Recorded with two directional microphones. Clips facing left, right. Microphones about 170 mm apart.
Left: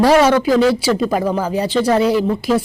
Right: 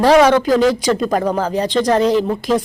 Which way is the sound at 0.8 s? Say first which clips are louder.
Even; 5° left (ahead or behind).